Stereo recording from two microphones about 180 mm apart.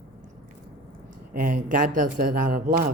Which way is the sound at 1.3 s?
50° right (ahead or behind).